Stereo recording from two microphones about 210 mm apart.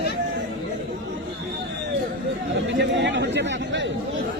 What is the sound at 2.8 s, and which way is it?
Chatter, 55° right (ahead or behind).